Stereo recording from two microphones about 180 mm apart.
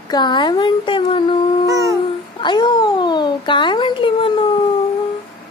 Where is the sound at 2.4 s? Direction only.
25° left (ahead or behind).